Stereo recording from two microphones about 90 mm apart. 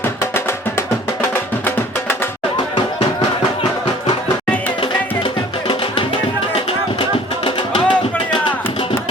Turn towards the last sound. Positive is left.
turn(degrees=80)